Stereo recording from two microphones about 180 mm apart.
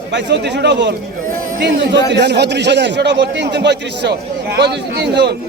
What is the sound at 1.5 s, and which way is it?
A man's voice, 55° right (ahead or behind).